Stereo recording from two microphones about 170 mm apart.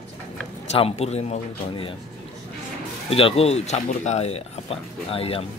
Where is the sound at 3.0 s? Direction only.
35° left (ahead or behind).